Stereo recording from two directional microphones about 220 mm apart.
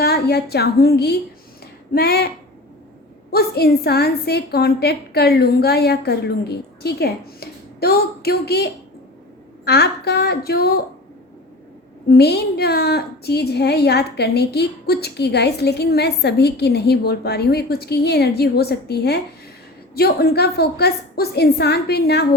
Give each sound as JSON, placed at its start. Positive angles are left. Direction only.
{"t": 0.0, "sound": "a woman's voice", "side_deg": 45}
{"t": 3.3, "sound": "a woman's voice", "side_deg": 45}
{"t": 9.6, "sound": "a woman's voice", "side_deg": 45}
{"t": 12.0, "sound": "a woman's voice", "side_deg": 45}